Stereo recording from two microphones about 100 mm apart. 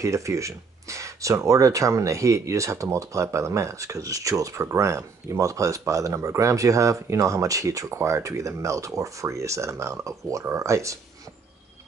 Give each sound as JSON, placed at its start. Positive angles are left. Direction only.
{"t": 0.0, "sound": "speech", "side_deg": -30}